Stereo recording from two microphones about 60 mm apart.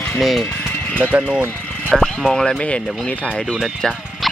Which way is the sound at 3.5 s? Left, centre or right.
Centre.